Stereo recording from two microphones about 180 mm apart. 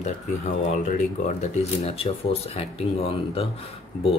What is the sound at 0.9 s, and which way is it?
Speech, 40° left (ahead or behind).